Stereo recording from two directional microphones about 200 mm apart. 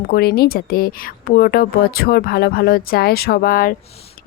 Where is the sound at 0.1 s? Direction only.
50° left (ahead or behind).